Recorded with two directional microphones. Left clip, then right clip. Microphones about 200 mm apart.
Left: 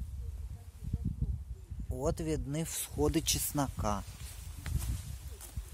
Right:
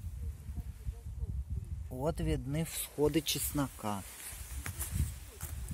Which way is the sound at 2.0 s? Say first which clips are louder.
Left 1 dB; 10° left (ahead or behind).